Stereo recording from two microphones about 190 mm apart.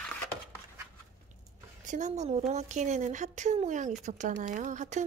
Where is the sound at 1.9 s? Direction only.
40° right (ahead or behind).